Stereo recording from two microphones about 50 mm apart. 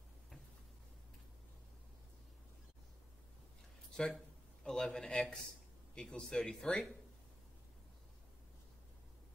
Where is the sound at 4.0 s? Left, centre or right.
Centre.